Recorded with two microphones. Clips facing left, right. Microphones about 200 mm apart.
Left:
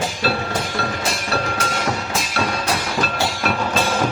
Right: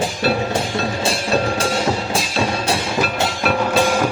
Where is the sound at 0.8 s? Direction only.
25° right (ahead or behind).